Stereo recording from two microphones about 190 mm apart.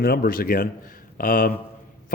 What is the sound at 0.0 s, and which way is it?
A man's voice, 50° left (ahead or behind).